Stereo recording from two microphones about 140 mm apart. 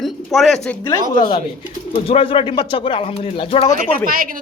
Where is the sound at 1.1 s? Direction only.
35° left (ahead or behind).